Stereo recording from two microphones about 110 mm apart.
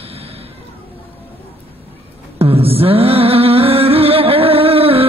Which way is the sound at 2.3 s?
60° right (ahead or behind).